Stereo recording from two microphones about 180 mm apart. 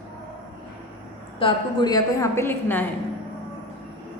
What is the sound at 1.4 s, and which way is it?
A woman's voice, 20° left (ahead or behind).